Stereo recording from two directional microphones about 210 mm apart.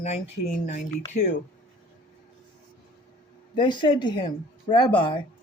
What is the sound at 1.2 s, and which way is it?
Speech, 50° left (ahead or behind).